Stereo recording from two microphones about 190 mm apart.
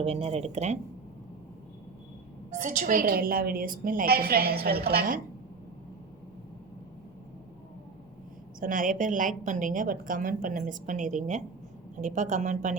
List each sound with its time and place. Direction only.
0.0 s speech: 30° right (ahead or behind)
2.5 s a woman's voice: 40° right (ahead or behind)
8.6 s a woman's voice: 45° right (ahead or behind)